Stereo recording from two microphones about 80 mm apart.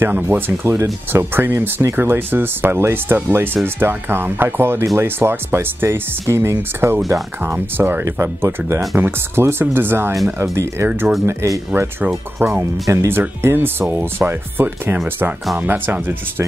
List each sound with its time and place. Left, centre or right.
0.0 s speech: right
11.7 s speech: right